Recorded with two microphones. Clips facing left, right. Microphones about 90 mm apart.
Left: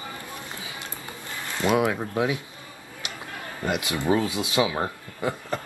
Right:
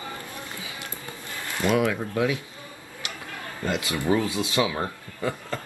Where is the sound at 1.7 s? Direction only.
25° left (ahead or behind).